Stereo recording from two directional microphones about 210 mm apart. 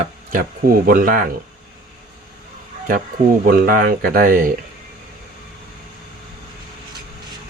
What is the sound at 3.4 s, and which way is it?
Speech, 40° right (ahead or behind).